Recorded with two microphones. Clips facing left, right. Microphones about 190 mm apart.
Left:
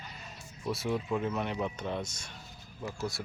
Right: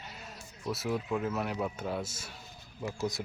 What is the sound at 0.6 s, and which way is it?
Speech, centre (ahead or behind).